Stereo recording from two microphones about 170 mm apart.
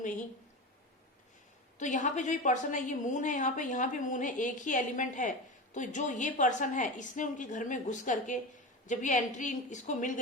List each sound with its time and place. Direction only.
1.8 s a woman's voice: 45° left (ahead or behind)